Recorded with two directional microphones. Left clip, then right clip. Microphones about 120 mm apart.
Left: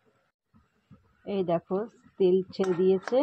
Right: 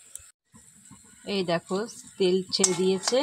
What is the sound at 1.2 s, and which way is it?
Speech, 15° right (ahead or behind).